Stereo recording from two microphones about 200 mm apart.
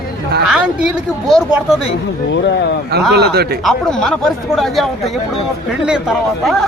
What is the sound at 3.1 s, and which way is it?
Speech, 55° right (ahead or behind).